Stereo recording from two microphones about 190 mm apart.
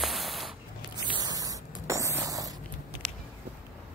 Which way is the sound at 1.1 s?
20° right (ahead or behind).